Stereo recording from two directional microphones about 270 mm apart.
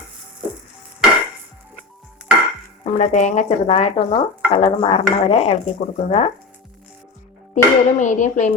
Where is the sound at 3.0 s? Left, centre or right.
Left.